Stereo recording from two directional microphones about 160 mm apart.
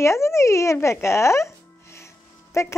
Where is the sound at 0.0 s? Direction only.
15° left (ahead or behind).